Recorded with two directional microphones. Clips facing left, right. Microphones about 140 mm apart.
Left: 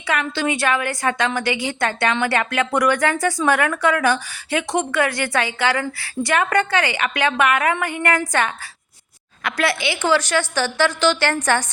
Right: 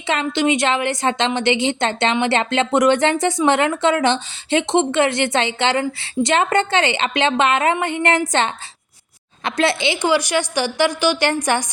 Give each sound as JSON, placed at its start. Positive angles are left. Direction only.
{"t": 0.1, "sound": "a woman's voice", "side_deg": -20}